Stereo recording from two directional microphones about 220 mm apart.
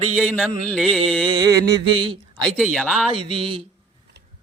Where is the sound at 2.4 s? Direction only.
5° left (ahead or behind).